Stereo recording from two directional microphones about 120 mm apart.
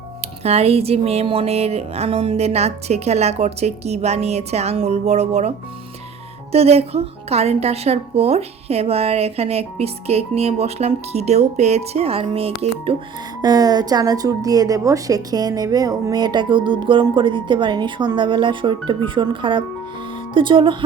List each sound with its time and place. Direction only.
0.4 s a woman's voice: 55° right (ahead or behind)
6.5 s a woman's voice: 60° right (ahead or behind)
13.4 s a woman's voice: 35° right (ahead or behind)